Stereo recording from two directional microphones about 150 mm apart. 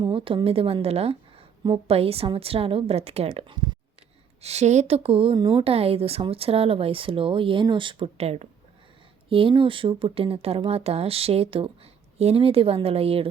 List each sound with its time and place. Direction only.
0.0 s a woman's voice: 35° right (ahead or behind)
4.4 s a woman's voice: 45° right (ahead or behind)